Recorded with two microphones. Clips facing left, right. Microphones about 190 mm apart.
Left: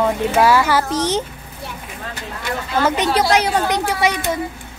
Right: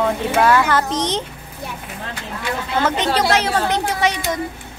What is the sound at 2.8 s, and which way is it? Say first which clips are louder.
Speech: left 2 dB; 10° left (ahead or behind).